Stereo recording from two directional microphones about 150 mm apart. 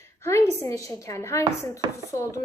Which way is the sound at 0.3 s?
20° left (ahead or behind).